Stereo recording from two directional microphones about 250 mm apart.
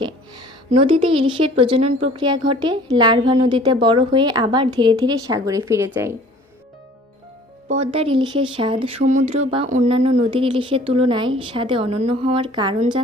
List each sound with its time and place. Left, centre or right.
0.0 s a woman's voice: centre
7.7 s speech: right